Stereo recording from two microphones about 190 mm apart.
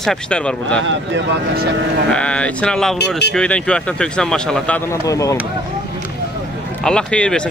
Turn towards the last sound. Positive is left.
turn(degrees=5)  # may be behind; listen again after turning